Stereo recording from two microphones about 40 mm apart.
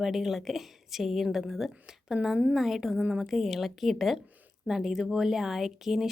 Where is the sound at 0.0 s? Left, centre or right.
Centre.